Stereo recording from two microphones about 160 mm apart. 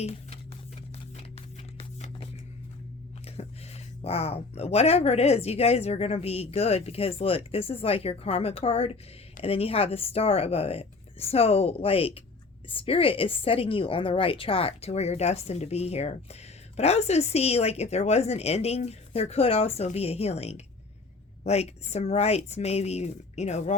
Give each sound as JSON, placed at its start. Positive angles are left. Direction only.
{"t": 0.0, "sound": "speech", "side_deg": 40}
{"t": 1.1, "sound": "a sound", "side_deg": 40}
{"t": 3.2, "sound": "a woman's voice", "side_deg": 40}